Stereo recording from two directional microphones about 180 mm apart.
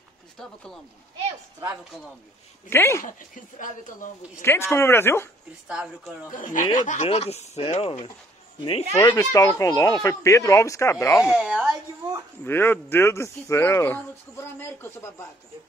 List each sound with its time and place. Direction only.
0.4 s speech: centre (ahead or behind)
2.7 s speech: 15° left (ahead or behind)
3.1 s speech: 45° left (ahead or behind)
4.4 s speech: 15° left (ahead or behind)
5.7 s speech: 5° right (ahead or behind)
6.3 s speech: 45° left (ahead or behind)
8.9 s speech: 20° left (ahead or behind)
11.3 s speech: 5° right (ahead or behind)
12.4 s speech: 10° left (ahead or behind)